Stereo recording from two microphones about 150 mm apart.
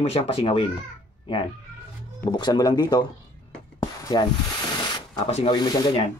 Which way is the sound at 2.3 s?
30° left (ahead or behind).